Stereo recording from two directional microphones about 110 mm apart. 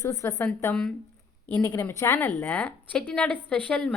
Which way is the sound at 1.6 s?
25° left (ahead or behind).